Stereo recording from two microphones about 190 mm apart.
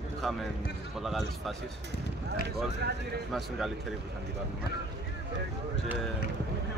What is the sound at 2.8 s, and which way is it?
Speech, 60° right (ahead or behind).